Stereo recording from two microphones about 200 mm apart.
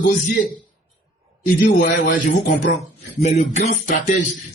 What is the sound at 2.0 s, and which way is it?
Music, 40° left (ahead or behind).